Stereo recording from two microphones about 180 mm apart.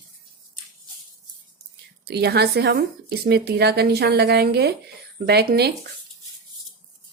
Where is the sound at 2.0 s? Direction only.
65° right (ahead or behind).